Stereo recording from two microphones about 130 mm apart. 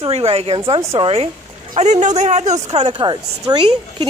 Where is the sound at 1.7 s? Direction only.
60° right (ahead or behind).